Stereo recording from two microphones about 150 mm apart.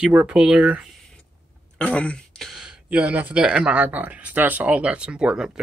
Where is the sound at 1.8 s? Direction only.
10° left (ahead or behind).